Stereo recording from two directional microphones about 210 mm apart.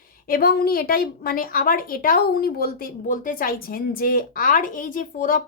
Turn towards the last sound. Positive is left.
turn(degrees=40)  # may be behind; listen again after turning